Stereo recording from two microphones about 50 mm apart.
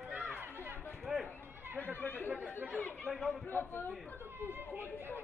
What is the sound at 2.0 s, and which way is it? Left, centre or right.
Chatter, left.